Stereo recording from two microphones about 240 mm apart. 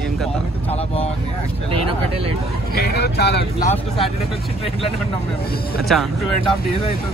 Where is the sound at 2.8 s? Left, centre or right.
Left.